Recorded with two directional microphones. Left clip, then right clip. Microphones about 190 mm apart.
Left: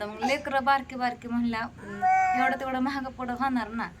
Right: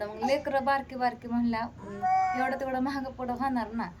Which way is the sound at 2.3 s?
5° right (ahead or behind).